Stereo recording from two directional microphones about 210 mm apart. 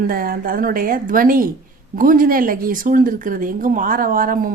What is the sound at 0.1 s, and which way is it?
Speech, 40° right (ahead or behind).